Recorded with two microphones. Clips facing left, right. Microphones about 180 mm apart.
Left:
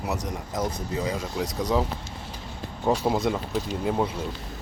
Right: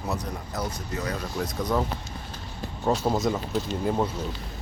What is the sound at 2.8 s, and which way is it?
Speech, 10° left (ahead or behind).